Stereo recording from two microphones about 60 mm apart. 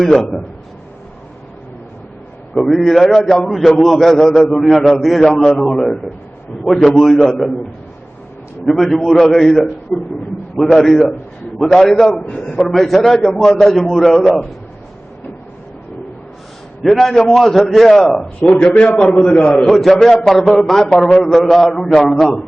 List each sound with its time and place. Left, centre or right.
0.2 s a man's voice: centre
2.5 s a man's voice: centre
8.6 s a man's voice: centre
16.8 s a man's voice: centre
18.5 s a man's voice: left
19.0 s a man's voice: centre